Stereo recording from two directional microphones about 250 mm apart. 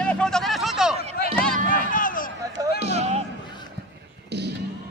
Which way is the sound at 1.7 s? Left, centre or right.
Left.